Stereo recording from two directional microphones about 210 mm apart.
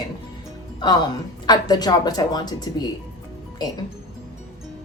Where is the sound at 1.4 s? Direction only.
20° left (ahead or behind).